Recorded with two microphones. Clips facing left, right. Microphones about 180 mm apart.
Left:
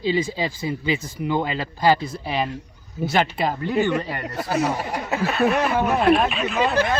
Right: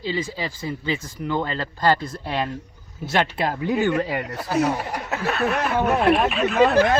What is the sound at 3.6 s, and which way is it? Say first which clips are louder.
Speech: right 1 dB; 15° right (ahead or behind).